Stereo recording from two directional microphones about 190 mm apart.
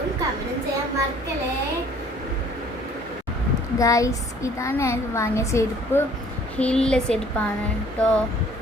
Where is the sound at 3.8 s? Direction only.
15° left (ahead or behind).